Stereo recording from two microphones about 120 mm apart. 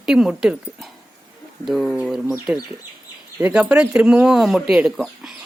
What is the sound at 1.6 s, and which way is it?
Speech, centre (ahead or behind).